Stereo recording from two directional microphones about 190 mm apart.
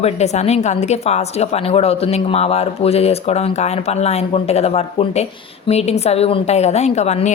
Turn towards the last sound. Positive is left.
turn(degrees=35)  # may be behind; listen again after turning